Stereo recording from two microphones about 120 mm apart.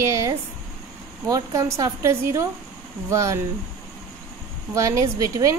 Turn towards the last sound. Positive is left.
turn(degrees=-25)  # may be behind; listen again after turning